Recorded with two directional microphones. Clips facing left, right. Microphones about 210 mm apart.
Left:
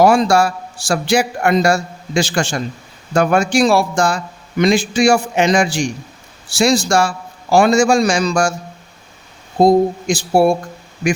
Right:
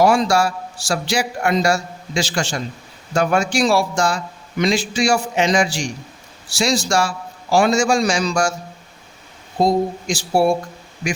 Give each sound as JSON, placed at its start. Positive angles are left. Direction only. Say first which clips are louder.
{"t": 0.0, "sound": "a man's voice", "louder": "left 3 dB", "side_deg": 55}
{"t": 9.6, "sound": "speech", "louder": "left 6 dB", "side_deg": 55}